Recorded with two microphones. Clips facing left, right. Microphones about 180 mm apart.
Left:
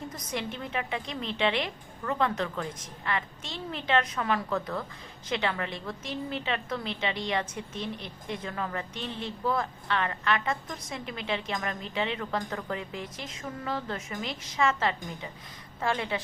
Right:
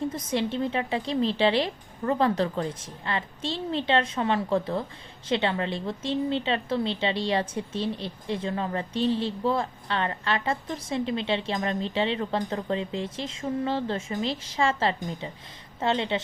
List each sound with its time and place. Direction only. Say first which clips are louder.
0.1 s a woman's voice: right 7 dB; 25° right (ahead or behind)